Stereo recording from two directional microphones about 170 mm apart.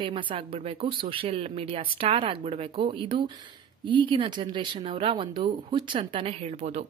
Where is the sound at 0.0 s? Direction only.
30° right (ahead or behind).